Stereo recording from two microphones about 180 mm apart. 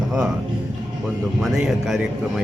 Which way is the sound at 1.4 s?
Centre (ahead or behind).